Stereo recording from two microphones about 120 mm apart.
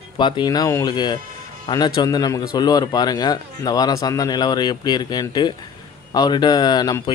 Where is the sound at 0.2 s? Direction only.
35° left (ahead or behind).